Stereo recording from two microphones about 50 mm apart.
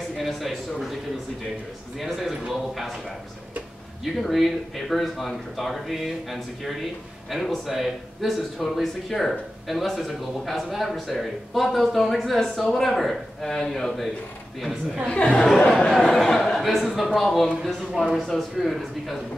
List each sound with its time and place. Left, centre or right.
0.1 s speech: centre
2.0 s a man's voice: centre
4.0 s speech: centre
15.0 s speech: centre
18.6 s speech: centre